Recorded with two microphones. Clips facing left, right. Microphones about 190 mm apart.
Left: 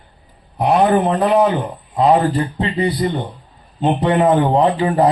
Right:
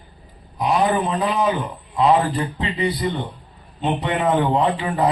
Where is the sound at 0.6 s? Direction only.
65° left (ahead or behind).